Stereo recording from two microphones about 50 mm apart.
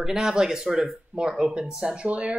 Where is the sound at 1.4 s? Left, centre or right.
Centre.